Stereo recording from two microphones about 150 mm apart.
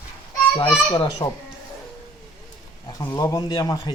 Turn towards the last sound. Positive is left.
turn(degrees=25)  # may be behind; listen again after turning